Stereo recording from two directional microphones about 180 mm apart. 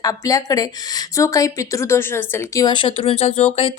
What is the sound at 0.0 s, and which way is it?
Speech, 20° left (ahead or behind).